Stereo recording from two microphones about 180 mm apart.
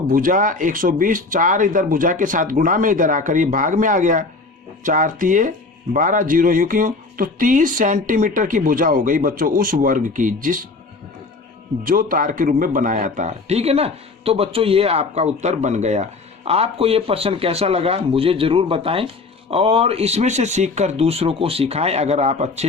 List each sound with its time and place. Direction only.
0.1 s speech: 50° right (ahead or behind)
11.8 s speech: 50° right (ahead or behind)